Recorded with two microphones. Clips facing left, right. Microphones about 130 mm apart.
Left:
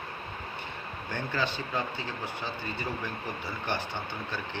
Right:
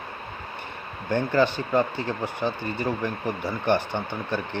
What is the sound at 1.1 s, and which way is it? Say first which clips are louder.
Speech: right 10 dB; 50° right (ahead or behind).